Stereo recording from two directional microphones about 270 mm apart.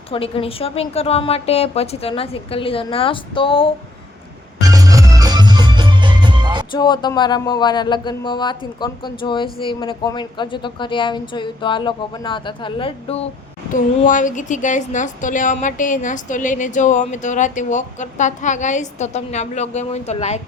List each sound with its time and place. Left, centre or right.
0.1 s a woman's voice: left
4.7 s music: centre
6.7 s a woman's voice: centre